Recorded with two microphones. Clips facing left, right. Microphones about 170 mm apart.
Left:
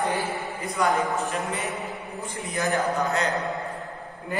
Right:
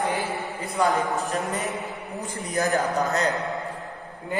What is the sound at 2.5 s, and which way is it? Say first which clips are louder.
Speech: right 2 dB; 40° right (ahead or behind).